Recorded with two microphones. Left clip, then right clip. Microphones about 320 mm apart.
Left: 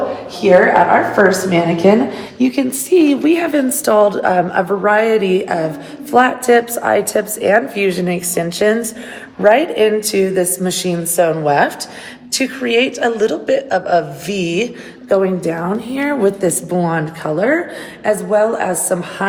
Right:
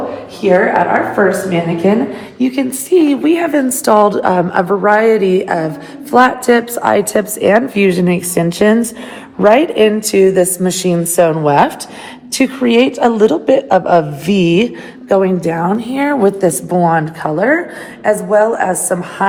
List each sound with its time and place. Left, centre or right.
0.4 s a woman's voice: centre
3.8 s a woman's voice: centre